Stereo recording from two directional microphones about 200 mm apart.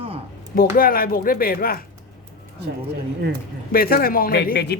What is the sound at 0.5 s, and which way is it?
A woman's voice, 45° left (ahead or behind).